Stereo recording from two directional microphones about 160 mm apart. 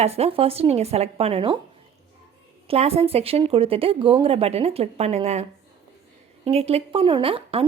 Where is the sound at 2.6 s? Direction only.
40° right (ahead or behind).